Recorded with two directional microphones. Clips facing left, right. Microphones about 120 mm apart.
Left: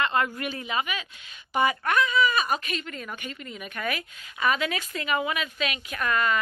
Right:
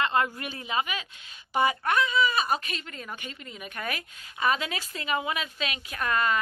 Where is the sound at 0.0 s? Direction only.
30° right (ahead or behind).